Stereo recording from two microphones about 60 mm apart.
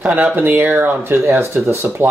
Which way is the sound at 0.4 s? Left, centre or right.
Right.